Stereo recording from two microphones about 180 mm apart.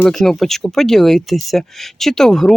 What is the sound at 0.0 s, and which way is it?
Speech, centre (ahead or behind).